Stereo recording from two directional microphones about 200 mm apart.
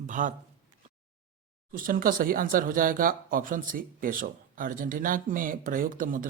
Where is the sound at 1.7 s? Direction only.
45° right (ahead or behind).